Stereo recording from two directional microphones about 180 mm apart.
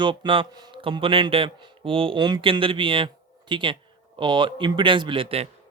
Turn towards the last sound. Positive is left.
turn(degrees=-30)  # may be behind; listen again after turning